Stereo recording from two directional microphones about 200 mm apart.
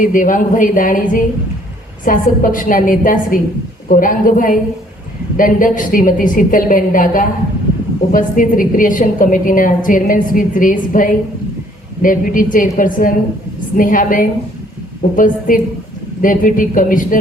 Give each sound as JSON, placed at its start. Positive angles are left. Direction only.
{"t": 0.0, "sound": "a woman's voice", "side_deg": 40}